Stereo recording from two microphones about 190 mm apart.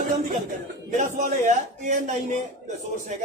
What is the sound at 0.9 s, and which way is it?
A man's voice, 40° right (ahead or behind).